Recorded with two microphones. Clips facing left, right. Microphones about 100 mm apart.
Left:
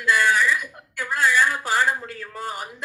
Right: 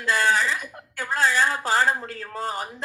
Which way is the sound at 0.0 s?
35° right (ahead or behind).